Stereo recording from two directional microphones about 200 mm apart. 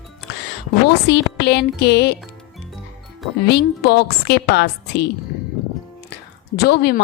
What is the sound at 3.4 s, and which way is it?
A woman's voice, 55° left (ahead or behind).